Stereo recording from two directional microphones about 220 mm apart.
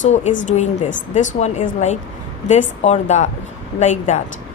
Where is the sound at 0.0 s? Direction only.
35° left (ahead or behind).